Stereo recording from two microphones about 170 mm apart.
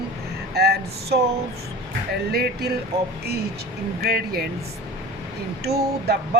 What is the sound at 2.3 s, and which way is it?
Speech, 65° right (ahead or behind).